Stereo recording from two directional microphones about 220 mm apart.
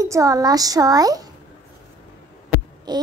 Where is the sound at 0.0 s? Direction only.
15° right (ahead or behind).